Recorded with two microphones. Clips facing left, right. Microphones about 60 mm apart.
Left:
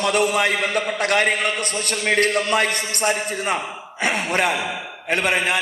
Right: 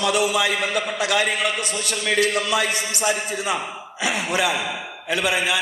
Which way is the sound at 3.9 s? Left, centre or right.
Left.